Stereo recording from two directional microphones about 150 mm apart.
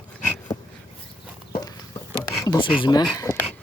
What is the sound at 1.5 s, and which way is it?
Chicken, 25° left (ahead or behind).